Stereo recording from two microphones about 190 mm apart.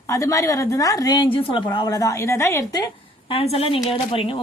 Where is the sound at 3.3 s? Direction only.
30° left (ahead or behind).